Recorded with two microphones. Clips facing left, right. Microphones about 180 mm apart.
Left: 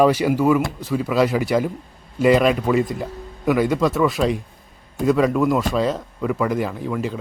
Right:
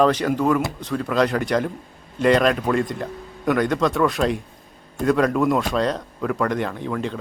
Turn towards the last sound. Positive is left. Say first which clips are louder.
# left 1 dB
turn(degrees=5)  # may be behind; listen again after turning